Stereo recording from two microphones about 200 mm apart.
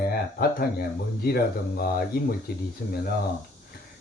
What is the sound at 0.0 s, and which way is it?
Speech, 50° left (ahead or behind).